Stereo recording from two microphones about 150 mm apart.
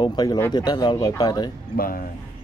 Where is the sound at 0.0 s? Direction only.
30° left (ahead or behind).